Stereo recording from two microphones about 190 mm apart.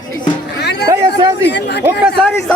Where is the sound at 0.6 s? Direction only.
60° left (ahead or behind).